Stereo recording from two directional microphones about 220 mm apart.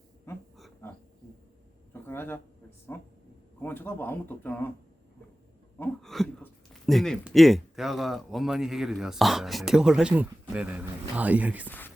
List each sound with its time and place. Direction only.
0.8 s a sound: 15° left (ahead or behind)
2.9 s speech: 10° left (ahead or behind)
5.8 s speech: centre (ahead or behind)